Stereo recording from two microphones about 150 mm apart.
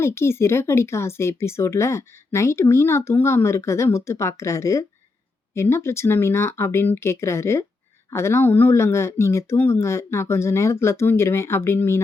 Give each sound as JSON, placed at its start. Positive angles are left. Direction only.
{"t": 0.0, "sound": "speech", "side_deg": 15}